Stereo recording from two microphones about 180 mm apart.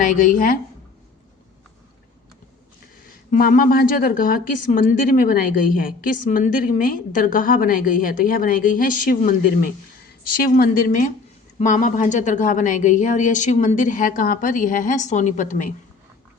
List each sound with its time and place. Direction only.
0.0 s a woman's voice: 50° left (ahead or behind)
3.3 s a woman's voice: 55° left (ahead or behind)